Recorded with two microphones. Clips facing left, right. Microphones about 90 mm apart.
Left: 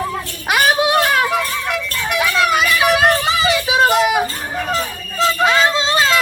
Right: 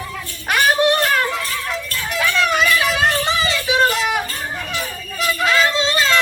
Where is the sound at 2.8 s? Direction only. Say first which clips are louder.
Left 4 dB; 60° left (ahead or behind).